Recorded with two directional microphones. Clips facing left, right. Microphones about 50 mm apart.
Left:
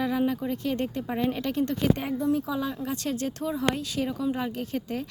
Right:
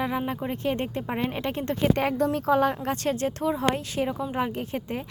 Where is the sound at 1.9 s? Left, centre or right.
Right.